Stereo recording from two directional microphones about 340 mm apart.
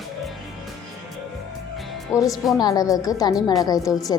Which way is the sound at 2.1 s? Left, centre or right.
Centre.